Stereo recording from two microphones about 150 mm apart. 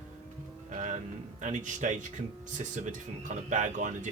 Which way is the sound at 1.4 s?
55° right (ahead or behind).